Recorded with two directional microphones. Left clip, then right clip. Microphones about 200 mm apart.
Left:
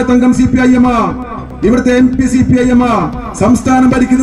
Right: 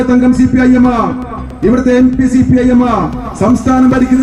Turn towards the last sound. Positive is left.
turn(degrees=35)  # may be behind; listen again after turning